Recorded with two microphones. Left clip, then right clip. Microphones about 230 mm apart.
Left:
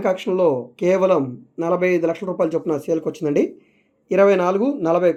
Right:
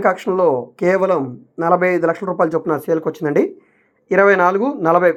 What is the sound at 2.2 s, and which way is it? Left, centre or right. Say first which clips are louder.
Speech: right 4 dB; centre.